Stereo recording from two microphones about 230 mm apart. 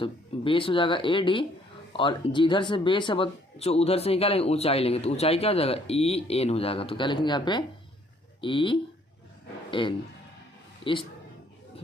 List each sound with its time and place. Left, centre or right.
0.0 s a man's voice: left